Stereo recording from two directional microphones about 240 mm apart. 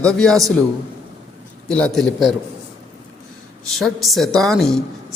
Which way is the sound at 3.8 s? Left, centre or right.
Centre.